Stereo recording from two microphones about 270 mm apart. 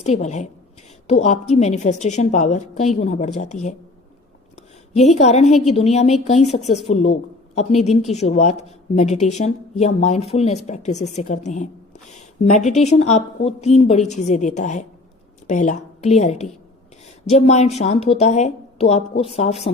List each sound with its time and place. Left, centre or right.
0.0 s speech: left
4.9 s a woman's voice: left